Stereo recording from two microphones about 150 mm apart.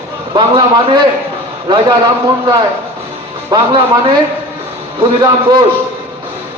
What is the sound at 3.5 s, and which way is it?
Speech, 35° right (ahead or behind).